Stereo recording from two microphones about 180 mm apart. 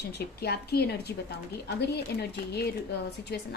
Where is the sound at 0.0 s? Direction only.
65° left (ahead or behind).